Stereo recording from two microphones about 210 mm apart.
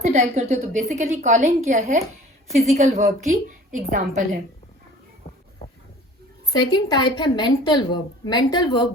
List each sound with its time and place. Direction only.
0.1 s a woman's voice: 30° right (ahead or behind)
6.5 s a woman's voice: 20° left (ahead or behind)